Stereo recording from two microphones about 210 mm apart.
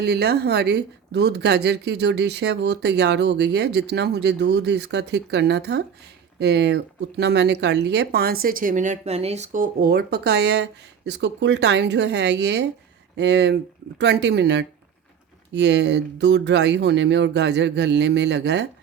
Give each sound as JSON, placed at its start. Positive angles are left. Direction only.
{"t": 0.0, "sound": "speech", "side_deg": -50}